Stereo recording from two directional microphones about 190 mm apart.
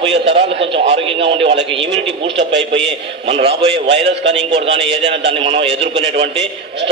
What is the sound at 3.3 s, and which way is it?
Speech, 30° right (ahead or behind).